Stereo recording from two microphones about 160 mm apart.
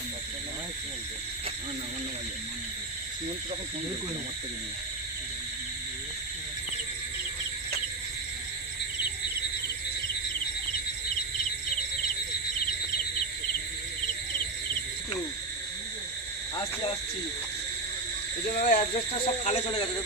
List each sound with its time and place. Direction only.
18.6 s speech: 55° left (ahead or behind)
19.1 s speech: 40° left (ahead or behind)